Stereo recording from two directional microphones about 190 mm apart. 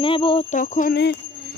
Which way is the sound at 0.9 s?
60° left (ahead or behind).